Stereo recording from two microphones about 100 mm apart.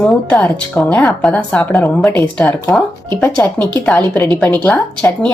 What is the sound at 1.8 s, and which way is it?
Speech, 30° left (ahead or behind).